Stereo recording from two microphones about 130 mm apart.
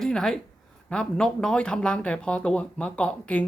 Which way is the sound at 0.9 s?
5° left (ahead or behind).